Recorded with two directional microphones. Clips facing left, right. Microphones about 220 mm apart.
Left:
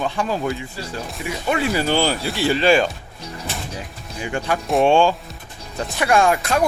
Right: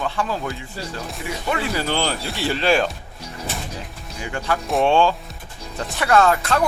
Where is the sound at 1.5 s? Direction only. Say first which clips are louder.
Left 4 dB; 15° left (ahead or behind).